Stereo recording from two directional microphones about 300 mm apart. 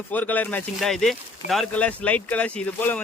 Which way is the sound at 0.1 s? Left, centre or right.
Centre.